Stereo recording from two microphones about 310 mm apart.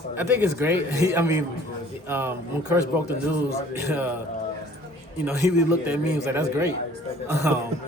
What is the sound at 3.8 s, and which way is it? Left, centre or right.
Speech, centre.